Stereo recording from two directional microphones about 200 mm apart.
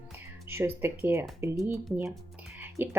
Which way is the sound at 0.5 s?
10° right (ahead or behind).